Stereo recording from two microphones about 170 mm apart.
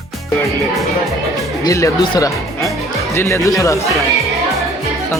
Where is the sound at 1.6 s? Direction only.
20° left (ahead or behind).